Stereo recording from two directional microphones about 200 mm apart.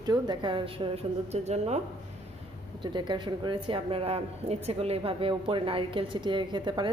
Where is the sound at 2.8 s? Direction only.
25° right (ahead or behind).